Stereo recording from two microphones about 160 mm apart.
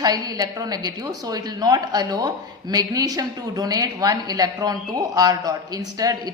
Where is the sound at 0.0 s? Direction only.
25° right (ahead or behind).